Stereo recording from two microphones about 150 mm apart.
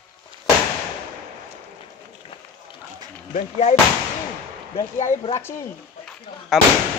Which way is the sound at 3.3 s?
50° left (ahead or behind).